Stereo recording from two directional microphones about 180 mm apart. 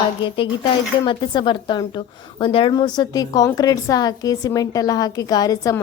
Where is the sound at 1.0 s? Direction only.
25° left (ahead or behind).